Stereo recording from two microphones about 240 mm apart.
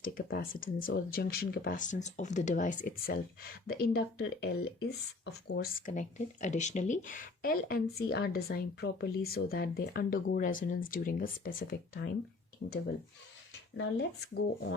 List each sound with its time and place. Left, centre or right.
0.0 s speech: left
13.7 s speech: left